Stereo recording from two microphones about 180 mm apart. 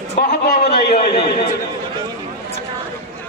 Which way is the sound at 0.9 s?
30° left (ahead or behind).